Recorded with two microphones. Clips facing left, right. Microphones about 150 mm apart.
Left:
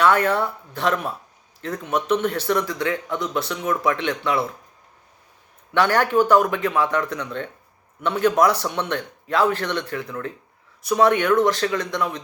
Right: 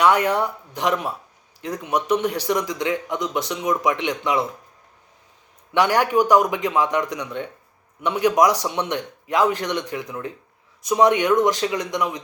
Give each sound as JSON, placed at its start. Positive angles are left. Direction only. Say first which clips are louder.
{"t": 0.0, "sound": "speech", "louder": "even", "side_deg": -15}
{"t": 5.7, "sound": "speech", "louder": "even", "side_deg": -15}